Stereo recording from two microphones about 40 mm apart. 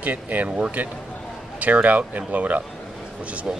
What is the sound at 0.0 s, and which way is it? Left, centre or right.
A man's voice, right.